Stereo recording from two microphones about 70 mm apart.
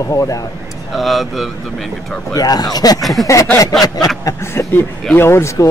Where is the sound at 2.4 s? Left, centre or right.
Left.